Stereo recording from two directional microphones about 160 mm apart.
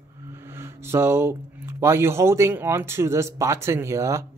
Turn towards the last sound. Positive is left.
turn(degrees=-20)  # may be behind; listen again after turning